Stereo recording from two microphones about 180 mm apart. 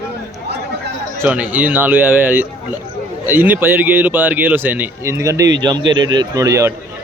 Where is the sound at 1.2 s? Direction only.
10° right (ahead or behind).